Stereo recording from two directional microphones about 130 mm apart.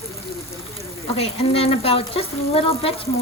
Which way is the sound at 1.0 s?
50° left (ahead or behind).